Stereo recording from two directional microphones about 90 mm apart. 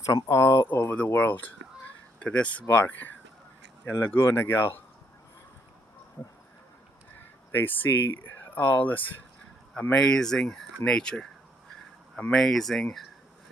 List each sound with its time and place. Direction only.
0.0 s speech: 40° left (ahead or behind)
0.3 s speech: 30° left (ahead or behind)
6.2 s speech: 30° left (ahead or behind); by 13.1 s 5° left (ahead or behind)